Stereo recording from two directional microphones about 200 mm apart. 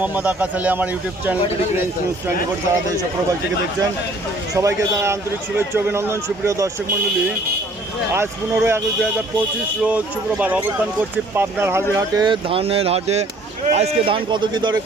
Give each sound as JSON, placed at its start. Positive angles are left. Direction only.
{"t": 0.0, "sound": "speech", "side_deg": -5}
{"t": 4.5, "sound": "speech", "side_deg": -15}
{"t": 8.1, "sound": "speech", "side_deg": -10}